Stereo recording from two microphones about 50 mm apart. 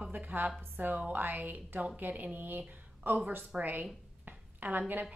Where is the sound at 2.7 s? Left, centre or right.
Right.